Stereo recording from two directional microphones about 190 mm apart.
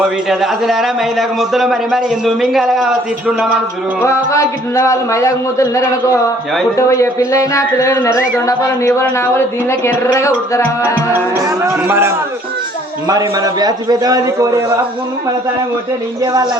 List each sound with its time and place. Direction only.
0.0 s a man's voice: centre (ahead or behind)
4.0 s a man's voice: 15° left (ahead or behind)
11.8 s a man's voice: 10° right (ahead or behind)
16.2 s a man's voice: 20° right (ahead or behind)